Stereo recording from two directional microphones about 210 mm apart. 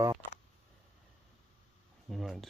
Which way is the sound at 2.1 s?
Centre (ahead or behind).